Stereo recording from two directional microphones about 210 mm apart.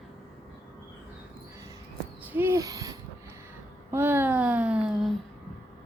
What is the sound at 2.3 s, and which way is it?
Owl, 10° right (ahead or behind).